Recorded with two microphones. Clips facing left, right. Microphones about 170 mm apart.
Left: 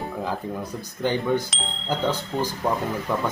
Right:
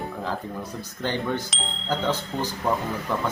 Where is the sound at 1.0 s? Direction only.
15° left (ahead or behind).